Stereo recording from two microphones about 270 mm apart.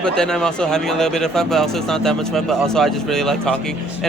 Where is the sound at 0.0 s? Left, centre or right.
Centre.